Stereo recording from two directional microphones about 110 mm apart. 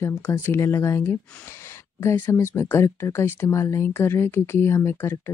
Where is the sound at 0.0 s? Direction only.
25° left (ahead or behind).